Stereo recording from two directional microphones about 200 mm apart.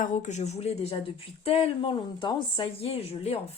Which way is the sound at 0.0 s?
40° left (ahead or behind).